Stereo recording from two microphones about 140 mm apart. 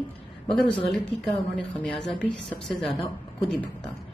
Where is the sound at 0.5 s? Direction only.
5° left (ahead or behind).